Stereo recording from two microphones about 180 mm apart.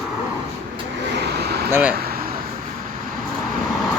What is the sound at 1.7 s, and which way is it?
Speech, 5° right (ahead or behind).